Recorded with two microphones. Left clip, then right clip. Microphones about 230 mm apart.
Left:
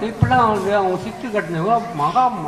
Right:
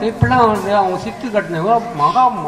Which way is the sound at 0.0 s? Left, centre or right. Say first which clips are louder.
Right 3 dB; right.